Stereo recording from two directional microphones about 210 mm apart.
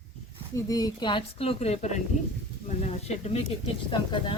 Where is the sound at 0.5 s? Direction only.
15° left (ahead or behind).